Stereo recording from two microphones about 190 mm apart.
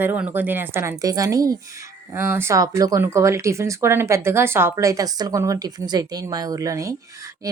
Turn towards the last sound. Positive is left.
turn(degrees=-15)  # may be behind; listen again after turning